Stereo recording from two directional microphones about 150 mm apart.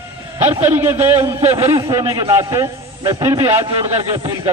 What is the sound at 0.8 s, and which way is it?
A man's voice, 15° right (ahead or behind).